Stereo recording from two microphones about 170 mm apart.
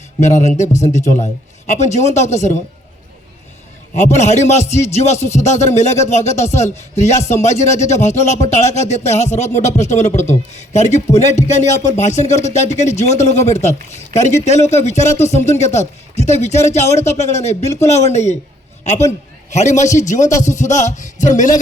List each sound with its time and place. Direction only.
0.2 s a man's voice: 45° left (ahead or behind)
3.9 s a man's voice: 40° left (ahead or behind)
19.5 s a man's voice: 45° left (ahead or behind)